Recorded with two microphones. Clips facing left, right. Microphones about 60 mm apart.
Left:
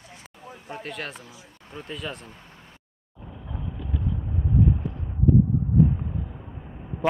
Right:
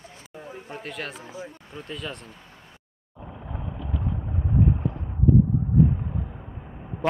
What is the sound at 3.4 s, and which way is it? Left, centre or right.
Vehicle, right.